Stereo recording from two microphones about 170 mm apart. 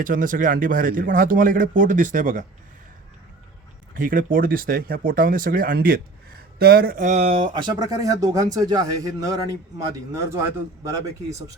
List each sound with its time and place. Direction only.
0.0 s speech: 55° right (ahead or behind)
3.9 s speech: 55° right (ahead or behind); by 11.5 s 20° right (ahead or behind)